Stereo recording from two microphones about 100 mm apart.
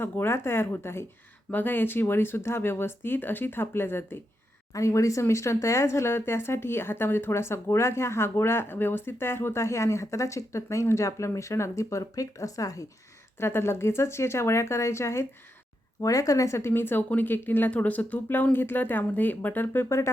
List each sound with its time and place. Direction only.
0.0 s speech: 25° left (ahead or behind)